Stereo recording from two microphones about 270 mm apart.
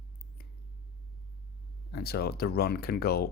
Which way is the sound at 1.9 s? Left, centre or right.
Left.